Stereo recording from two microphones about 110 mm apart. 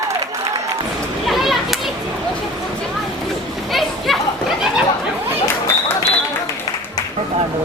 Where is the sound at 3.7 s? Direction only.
Centre (ahead or behind).